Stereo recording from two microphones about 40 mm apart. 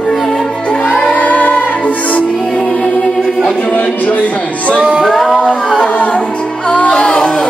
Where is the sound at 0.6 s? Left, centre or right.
Left.